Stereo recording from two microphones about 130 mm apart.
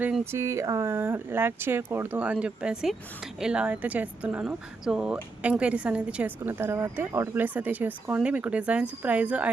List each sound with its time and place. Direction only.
0.3 s speech: 20° right (ahead or behind)